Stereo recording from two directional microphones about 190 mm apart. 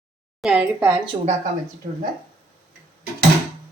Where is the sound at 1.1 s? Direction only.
25° right (ahead or behind).